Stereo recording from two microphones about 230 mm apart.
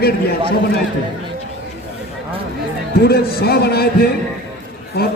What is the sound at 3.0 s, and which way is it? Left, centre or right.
A man's voice, left.